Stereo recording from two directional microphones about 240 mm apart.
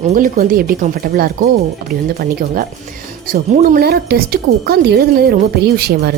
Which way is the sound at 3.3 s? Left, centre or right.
Right.